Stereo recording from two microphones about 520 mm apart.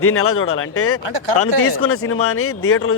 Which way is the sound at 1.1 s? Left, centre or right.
Right.